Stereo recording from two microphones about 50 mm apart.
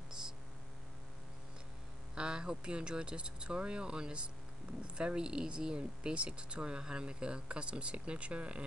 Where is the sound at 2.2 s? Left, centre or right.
Centre.